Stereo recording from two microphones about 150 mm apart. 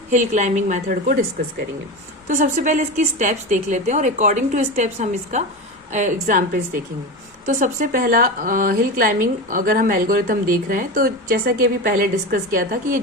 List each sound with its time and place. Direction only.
0.1 s a woman's voice: 55° right (ahead or behind)
2.2 s a woman's voice: 55° right (ahead or behind)